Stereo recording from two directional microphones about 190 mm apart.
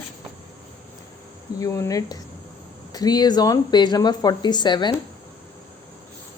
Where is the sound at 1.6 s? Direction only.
15° left (ahead or behind).